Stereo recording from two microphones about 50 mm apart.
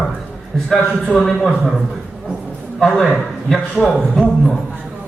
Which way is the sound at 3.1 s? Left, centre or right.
Centre.